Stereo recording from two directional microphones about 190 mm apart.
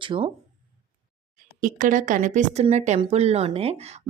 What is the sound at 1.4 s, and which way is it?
Speech, 45° right (ahead or behind).